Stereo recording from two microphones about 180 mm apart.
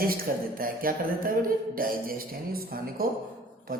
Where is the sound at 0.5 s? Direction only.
55° right (ahead or behind).